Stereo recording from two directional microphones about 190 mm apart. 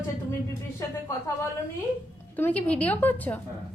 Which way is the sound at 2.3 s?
10° left (ahead or behind).